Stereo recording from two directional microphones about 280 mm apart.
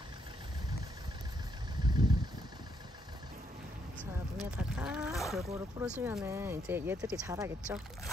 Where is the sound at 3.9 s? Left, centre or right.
Centre.